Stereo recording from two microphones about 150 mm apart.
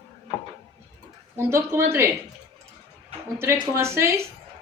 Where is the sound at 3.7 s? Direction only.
15° right (ahead or behind).